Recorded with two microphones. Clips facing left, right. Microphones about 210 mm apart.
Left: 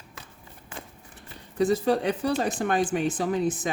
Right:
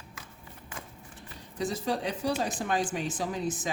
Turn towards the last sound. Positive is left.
turn(degrees=60)  # may be behind; listen again after turning